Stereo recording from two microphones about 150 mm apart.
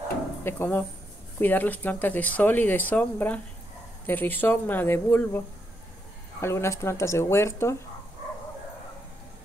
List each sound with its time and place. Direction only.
0.4 s speech: 15° left (ahead or behind)
6.4 s speech: 20° left (ahead or behind)